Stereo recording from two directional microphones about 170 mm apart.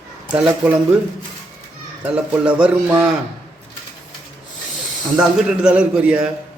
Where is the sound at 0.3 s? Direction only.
5° right (ahead or behind).